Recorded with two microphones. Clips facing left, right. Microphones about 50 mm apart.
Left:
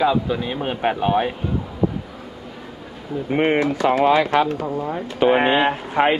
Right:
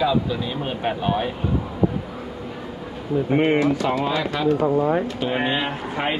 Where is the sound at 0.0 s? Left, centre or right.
Left.